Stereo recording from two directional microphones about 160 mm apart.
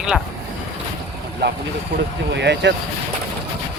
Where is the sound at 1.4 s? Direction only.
90° right.